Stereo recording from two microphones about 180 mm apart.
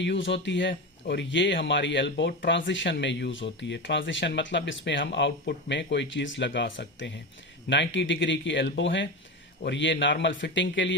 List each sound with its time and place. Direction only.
0.0 s speech: 85° left